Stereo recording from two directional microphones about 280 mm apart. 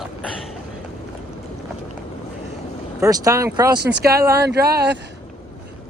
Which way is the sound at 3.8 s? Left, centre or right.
Right.